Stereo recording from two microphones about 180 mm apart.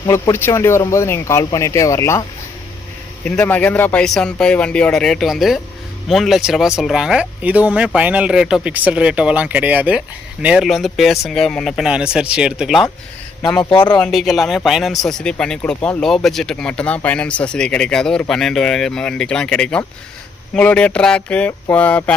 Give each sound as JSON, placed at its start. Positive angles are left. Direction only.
{"t": 0.0, "sound": "speech", "side_deg": 15}
{"t": 3.2, "sound": "speech", "side_deg": 10}
{"t": 13.6, "sound": "speech", "side_deg": 25}
{"t": 14.0, "sound": "speech", "side_deg": 0}